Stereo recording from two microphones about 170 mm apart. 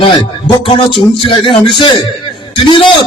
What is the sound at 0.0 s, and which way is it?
Speech, 30° left (ahead or behind).